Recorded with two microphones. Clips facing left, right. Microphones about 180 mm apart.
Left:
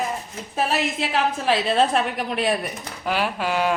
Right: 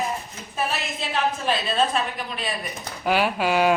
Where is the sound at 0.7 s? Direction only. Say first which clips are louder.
Left 5 dB; 90° left; by 2.5 s 70° left (ahead or behind).